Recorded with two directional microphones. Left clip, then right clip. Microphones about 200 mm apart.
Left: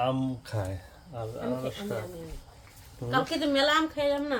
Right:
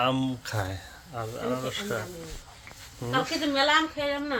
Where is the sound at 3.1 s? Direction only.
15° left (ahead or behind).